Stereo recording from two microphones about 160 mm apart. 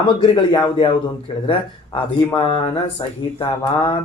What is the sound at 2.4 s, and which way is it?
Speech, 35° left (ahead or behind).